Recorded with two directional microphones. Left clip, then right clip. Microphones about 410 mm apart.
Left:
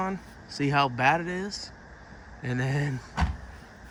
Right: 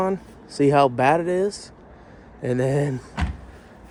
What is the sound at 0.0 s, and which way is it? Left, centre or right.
Speech, centre.